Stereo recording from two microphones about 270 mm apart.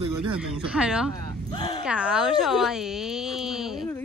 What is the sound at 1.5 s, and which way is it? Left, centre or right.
Speech, centre.